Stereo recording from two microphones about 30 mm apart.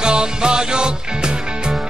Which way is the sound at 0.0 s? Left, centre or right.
Right.